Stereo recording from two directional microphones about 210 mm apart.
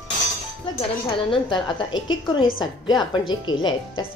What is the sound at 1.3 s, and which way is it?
Speech, 20° left (ahead or behind).